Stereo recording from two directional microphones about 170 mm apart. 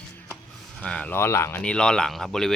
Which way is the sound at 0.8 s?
10° left (ahead or behind).